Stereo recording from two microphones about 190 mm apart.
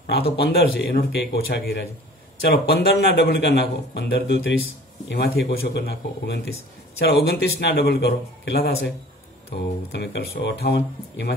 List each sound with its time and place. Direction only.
0.4 s a man's voice: 60° left (ahead or behind)